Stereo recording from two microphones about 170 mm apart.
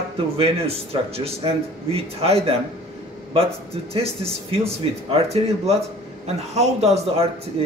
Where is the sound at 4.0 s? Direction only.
35° right (ahead or behind).